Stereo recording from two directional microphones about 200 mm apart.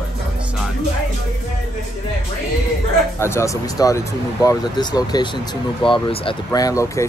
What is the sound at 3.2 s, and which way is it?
Speech, 15° left (ahead or behind).